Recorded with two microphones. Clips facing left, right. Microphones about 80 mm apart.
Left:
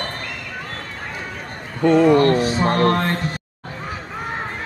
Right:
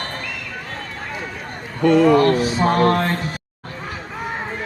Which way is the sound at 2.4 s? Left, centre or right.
Centre.